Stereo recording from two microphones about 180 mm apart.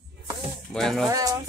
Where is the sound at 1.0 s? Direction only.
20° right (ahead or behind).